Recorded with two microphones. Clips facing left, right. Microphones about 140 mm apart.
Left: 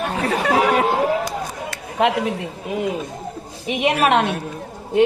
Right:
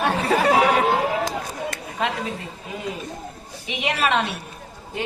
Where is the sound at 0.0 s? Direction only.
75° right (ahead or behind).